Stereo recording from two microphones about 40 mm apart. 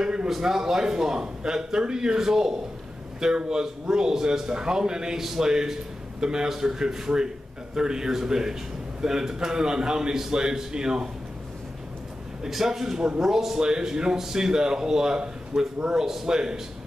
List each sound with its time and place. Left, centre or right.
0.0 s a sound: centre
0.4 s speech: centre
5.2 s speech: centre
5.5 s speech: centre
12.4 s speech: centre